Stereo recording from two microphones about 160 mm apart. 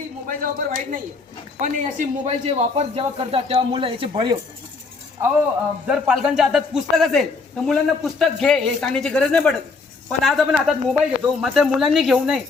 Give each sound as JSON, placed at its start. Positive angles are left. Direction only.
{"t": 0.3, "sound": "speech", "side_deg": -60}
{"t": 1.6, "sound": "a man's voice", "side_deg": -50}
{"t": 5.9, "sound": "a man's voice", "side_deg": -5}